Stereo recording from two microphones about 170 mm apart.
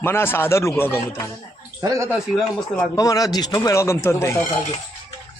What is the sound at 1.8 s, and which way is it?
Speech, 15° right (ahead or behind).